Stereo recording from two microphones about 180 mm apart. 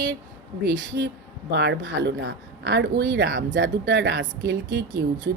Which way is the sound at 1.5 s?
75° right (ahead or behind).